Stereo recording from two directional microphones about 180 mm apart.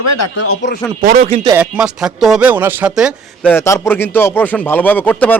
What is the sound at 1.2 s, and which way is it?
Speech, 30° right (ahead or behind).